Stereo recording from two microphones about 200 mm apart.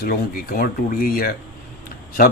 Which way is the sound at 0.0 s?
45° left (ahead or behind).